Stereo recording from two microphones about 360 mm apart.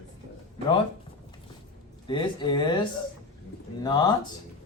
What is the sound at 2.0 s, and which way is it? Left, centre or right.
Speech, centre.